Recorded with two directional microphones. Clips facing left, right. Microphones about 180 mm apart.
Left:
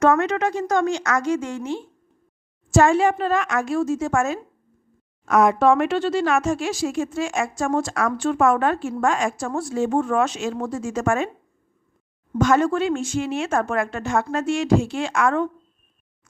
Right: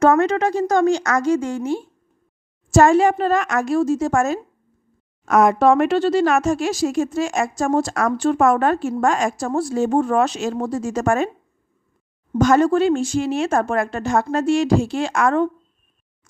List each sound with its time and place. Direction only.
0.0 s speech: 35° right (ahead or behind)
12.4 s speech: 40° right (ahead or behind)